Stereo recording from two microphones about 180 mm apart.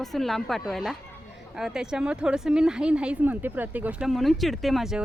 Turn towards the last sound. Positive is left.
turn(degrees=0)  # may be behind; listen again after turning